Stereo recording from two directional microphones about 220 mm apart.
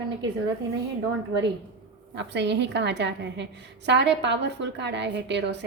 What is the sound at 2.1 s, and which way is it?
A woman's voice, 55° right (ahead or behind).